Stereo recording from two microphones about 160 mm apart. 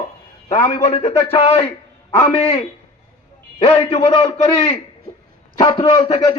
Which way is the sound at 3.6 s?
35° left (ahead or behind).